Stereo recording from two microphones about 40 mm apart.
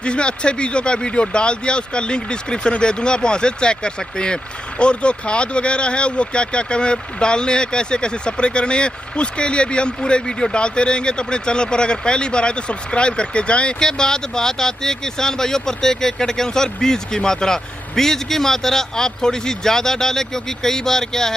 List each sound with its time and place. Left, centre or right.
0.0 s speech: left
13.8 s speech: centre